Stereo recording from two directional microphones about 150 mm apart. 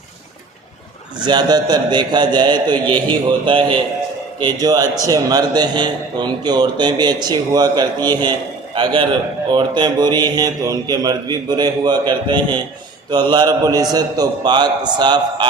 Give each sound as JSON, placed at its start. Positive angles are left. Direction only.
{"t": 1.2, "sound": "a man's voice", "side_deg": -30}